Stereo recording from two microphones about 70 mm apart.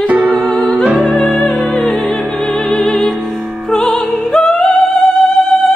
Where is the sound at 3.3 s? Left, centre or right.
Centre.